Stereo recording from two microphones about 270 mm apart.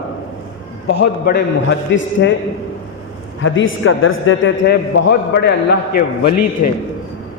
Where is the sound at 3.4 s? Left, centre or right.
Left.